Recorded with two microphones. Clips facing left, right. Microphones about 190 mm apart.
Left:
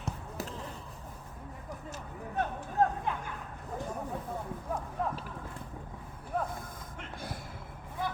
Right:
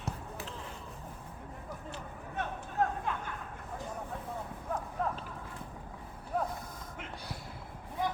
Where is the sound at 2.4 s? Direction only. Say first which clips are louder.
Left 4 dB; 35° left (ahead or behind).